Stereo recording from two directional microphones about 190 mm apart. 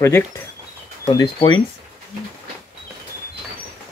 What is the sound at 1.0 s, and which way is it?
Speech, 20° left (ahead or behind).